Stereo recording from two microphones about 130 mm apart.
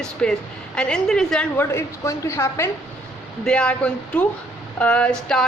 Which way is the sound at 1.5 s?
20° left (ahead or behind).